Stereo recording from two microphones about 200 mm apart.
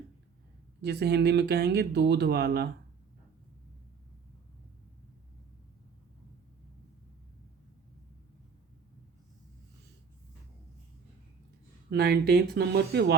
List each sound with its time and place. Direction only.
0.8 s speech: 55° right (ahead or behind)
11.9 s speech: 50° right (ahead or behind)